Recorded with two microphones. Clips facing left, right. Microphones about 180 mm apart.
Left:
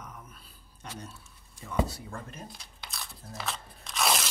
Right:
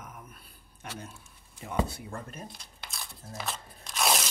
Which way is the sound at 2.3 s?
Centre (ahead or behind).